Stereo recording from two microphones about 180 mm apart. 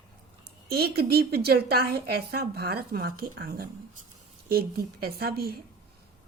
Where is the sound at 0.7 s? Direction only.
60° right (ahead or behind).